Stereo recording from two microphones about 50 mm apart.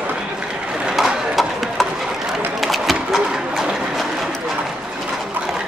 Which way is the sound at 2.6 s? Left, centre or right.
Centre.